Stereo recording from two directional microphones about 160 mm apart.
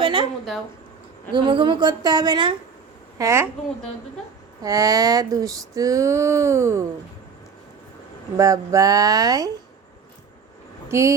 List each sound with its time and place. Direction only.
0.0 s a sound: 30° right (ahead or behind)
1.3 s female singing: 30° right (ahead or behind)
3.2 s a woman's voice: 15° right (ahead or behind)
4.6 s female singing: 20° right (ahead or behind)
8.4 s female singing: 20° right (ahead or behind)
10.8 s speech: 15° right (ahead or behind)